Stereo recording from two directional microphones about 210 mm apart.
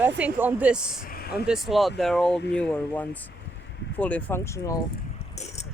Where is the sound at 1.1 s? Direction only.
45° left (ahead or behind).